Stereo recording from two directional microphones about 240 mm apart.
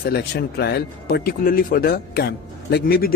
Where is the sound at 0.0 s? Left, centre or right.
Left.